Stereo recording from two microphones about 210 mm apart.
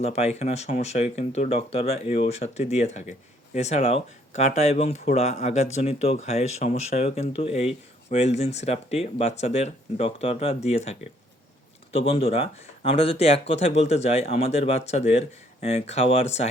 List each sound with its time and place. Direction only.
0.0 s speech: 30° left (ahead or behind)